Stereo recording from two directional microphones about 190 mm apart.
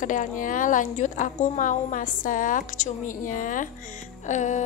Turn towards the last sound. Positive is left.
turn(degrees=40)  # may be behind; listen again after turning